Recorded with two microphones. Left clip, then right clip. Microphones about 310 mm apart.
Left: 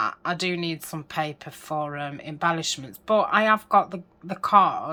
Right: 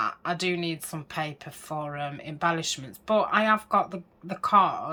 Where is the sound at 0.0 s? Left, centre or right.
Centre.